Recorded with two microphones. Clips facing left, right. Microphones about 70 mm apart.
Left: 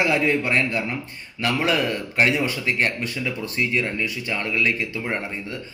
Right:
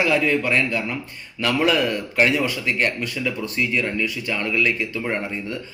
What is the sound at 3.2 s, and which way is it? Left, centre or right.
Speech, left.